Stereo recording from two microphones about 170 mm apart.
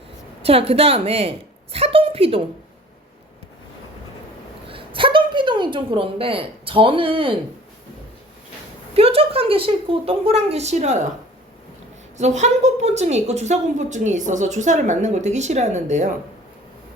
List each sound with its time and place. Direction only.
0.4 s a woman's voice: 35° right (ahead or behind)
4.7 s a woman's voice: 30° right (ahead or behind)
9.0 s a woman's voice: 35° right (ahead or behind)
12.1 s a woman's voice: 45° right (ahead or behind)